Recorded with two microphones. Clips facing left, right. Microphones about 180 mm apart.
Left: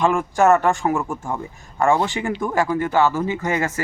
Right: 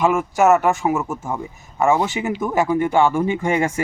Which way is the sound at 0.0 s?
5° right (ahead or behind).